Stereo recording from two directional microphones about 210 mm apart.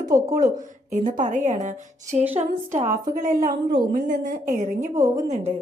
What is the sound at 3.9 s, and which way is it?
Speech, 40° right (ahead or behind).